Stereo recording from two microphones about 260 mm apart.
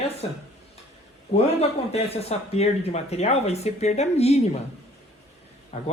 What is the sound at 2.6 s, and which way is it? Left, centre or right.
Speech, left.